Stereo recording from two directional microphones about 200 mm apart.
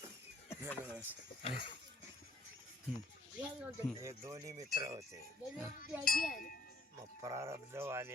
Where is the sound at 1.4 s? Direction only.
30° left (ahead or behind).